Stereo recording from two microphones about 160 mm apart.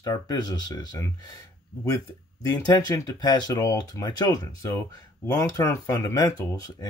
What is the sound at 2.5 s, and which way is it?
Speech, 25° left (ahead or behind).